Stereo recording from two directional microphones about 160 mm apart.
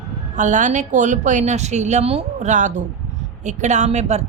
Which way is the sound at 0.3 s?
50° right (ahead or behind).